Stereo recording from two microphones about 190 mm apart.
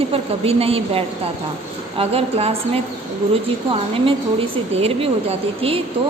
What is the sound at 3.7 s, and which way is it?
A woman's voice, 30° right (ahead or behind).